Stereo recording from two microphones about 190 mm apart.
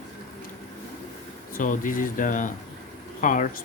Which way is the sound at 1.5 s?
45° left (ahead or behind).